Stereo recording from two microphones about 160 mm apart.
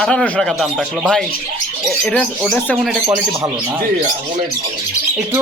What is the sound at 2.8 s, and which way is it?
Speech, 10° right (ahead or behind).